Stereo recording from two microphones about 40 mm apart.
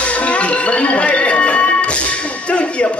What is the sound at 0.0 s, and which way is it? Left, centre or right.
Music, left.